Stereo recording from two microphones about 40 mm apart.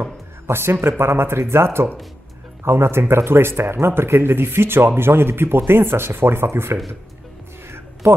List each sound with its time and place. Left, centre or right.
0.5 s speech: right